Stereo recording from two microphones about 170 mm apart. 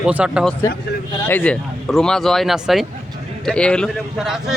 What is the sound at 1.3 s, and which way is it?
Speech, 5° left (ahead or behind).